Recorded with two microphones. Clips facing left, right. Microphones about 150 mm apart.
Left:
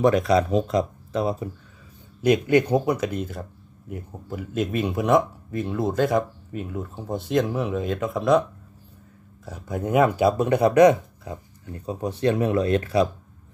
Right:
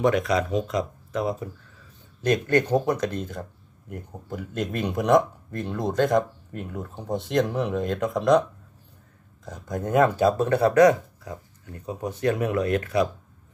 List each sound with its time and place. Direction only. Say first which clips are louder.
0.0 s speech: left 3 dB; 35° left (ahead or behind)
2.2 s speech: left 3 dB; 10° left (ahead or behind)
9.5 s speech: left 1 dB; 5° left (ahead or behind); by 13.1 s 30° left (ahead or behind)